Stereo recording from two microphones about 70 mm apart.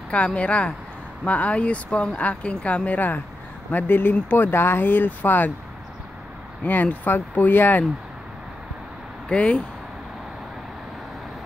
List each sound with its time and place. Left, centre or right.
0.1 s speech: centre
6.6 s speech: left
9.3 s speech: centre